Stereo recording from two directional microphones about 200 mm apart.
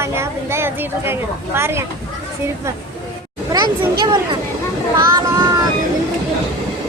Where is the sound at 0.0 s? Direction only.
10° right (ahead or behind).